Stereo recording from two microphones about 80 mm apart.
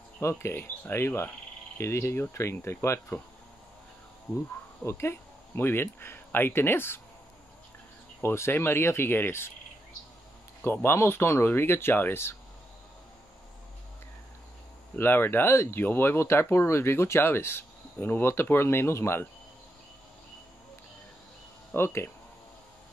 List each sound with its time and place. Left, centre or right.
0.2 s speech: left
4.8 s speech: left
8.2 s speech: left
10.6 s speech: left
15.0 s speech: left
21.7 s speech: left